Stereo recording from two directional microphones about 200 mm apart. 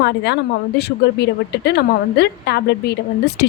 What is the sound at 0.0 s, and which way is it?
A woman's voice, 55° left (ahead or behind).